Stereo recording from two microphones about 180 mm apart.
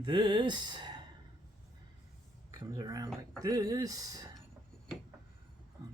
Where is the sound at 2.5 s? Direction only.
20° right (ahead or behind).